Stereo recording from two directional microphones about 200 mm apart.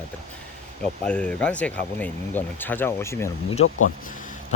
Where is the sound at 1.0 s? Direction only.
5° left (ahead or behind).